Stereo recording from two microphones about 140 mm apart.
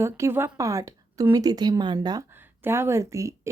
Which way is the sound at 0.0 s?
20° right (ahead or behind).